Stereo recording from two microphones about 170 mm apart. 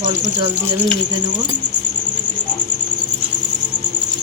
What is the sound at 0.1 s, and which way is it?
Speech, 20° right (ahead or behind).